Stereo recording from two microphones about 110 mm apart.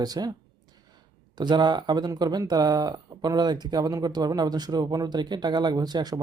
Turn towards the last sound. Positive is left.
turn(degrees=-40)  # may be behind; listen again after turning